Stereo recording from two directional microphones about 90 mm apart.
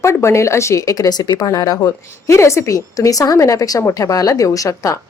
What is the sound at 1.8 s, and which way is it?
A woman's voice, 30° left (ahead or behind).